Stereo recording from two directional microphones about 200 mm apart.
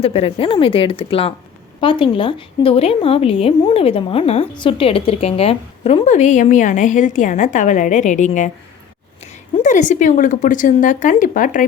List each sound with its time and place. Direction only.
0.0 s a woman's voice: 30° left (ahead or behind)